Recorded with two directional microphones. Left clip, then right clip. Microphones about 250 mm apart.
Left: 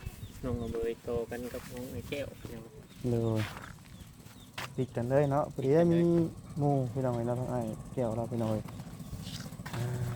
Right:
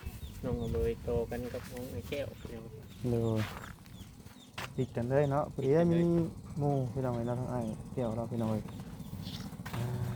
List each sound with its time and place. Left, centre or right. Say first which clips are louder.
0.4 s speech: even; left
3.1 s speech: left 1 dB; centre
9.2 s vehicle: left 1 dB; left
9.6 s music: left 1 dB; centre